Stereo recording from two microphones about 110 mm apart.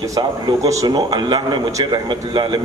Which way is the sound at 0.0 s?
30° right (ahead or behind).